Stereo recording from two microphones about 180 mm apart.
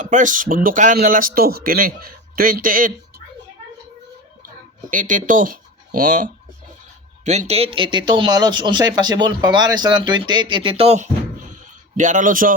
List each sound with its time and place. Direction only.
0.0 s speech: 45° right (ahead or behind)
4.9 s speech: 45° right (ahead or behind)
7.3 s speech: 35° right (ahead or behind)